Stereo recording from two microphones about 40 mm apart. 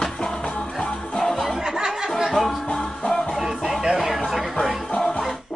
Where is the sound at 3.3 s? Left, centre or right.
Centre.